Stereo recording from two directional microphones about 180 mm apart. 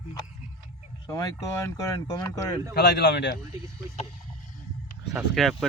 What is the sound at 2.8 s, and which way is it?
Speech, 70° left (ahead or behind).